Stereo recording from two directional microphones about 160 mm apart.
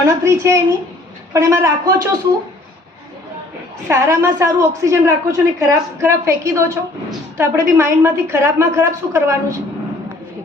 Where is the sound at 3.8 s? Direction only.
20° right (ahead or behind).